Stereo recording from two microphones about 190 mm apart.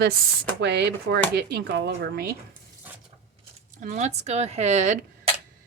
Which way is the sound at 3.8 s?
40° right (ahead or behind).